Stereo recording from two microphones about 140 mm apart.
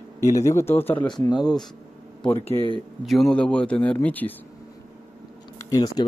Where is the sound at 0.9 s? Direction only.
35° left (ahead or behind).